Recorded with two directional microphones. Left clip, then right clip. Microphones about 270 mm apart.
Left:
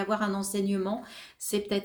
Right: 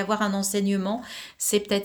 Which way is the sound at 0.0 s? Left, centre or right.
Right.